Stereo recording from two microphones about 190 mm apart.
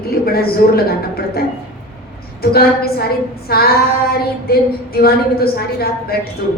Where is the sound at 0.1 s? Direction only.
55° left (ahead or behind).